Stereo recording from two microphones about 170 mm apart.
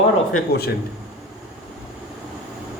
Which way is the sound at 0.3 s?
70° left (ahead or behind).